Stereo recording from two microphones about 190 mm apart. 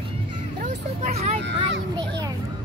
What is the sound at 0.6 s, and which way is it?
Speech, 35° right (ahead or behind).